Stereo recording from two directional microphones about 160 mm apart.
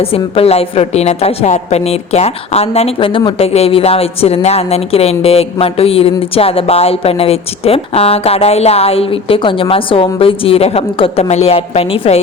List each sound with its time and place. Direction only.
0.0 s a woman's voice: 35° left (ahead or behind)